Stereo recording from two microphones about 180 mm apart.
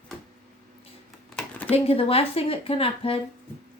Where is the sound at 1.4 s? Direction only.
5° left (ahead or behind).